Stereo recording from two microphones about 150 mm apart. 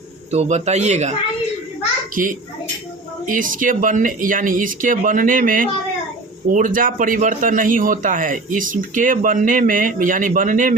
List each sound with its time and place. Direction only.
0.3 s a man's voice: 50° right (ahead or behind)
3.2 s a man's voice: 60° right (ahead or behind)